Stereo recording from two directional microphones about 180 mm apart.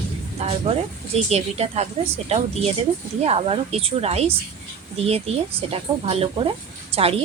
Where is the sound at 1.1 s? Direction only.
35° right (ahead or behind).